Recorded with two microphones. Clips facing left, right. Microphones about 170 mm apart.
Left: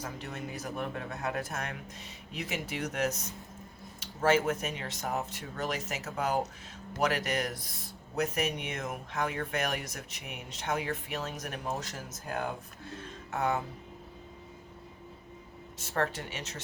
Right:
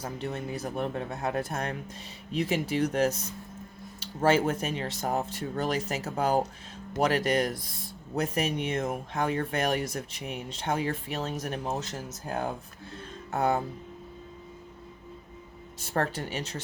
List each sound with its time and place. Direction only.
0.0 s speech: 30° right (ahead or behind)
15.8 s speech: 35° right (ahead or behind)